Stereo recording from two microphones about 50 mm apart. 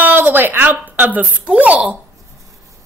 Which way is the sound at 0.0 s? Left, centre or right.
Right.